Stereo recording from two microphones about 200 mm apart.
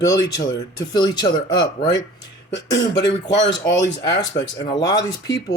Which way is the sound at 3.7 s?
65° left (ahead or behind).